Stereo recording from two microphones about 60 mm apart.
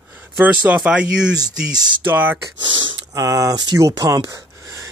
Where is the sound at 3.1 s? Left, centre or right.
Right.